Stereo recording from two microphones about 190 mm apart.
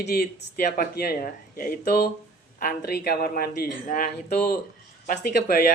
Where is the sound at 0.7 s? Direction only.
50° left (ahead or behind).